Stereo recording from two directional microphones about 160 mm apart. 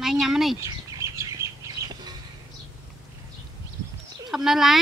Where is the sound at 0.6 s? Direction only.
20° right (ahead or behind).